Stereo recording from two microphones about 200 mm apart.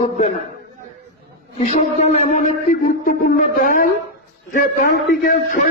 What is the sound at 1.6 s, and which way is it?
Speech, 35° left (ahead or behind).